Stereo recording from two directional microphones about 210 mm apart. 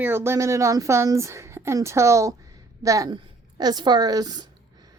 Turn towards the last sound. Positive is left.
turn(degrees=-20)  # may be behind; listen again after turning